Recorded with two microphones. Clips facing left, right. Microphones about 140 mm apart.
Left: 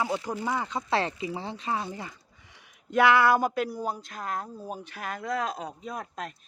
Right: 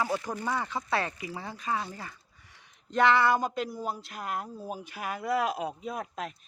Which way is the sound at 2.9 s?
5° left (ahead or behind).